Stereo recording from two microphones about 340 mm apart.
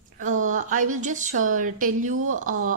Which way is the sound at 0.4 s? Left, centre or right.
Right.